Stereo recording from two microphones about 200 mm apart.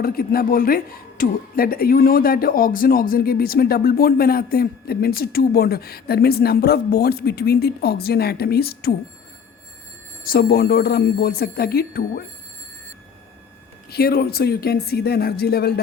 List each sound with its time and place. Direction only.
0.0 s speech: 45° left (ahead or behind)
10.2 s speech: 50° left (ahead or behind)
13.9 s speech: 50° left (ahead or behind)